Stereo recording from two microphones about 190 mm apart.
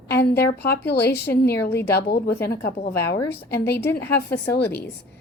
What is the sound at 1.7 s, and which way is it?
Speech, 10° left (ahead or behind).